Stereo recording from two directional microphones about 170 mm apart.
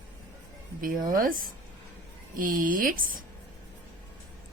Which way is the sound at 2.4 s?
55° right (ahead or behind).